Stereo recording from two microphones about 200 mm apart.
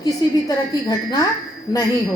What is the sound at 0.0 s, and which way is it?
A woman's voice, 20° left (ahead or behind).